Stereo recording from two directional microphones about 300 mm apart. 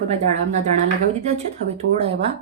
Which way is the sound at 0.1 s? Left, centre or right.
Right.